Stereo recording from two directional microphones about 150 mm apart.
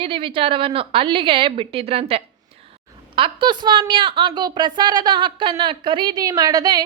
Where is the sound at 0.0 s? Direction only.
35° right (ahead or behind).